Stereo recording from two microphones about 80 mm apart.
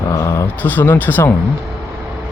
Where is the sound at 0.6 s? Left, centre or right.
Left.